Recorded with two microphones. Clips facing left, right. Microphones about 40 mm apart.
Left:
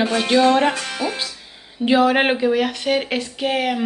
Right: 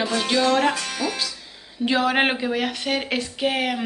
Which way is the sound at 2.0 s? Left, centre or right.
Centre.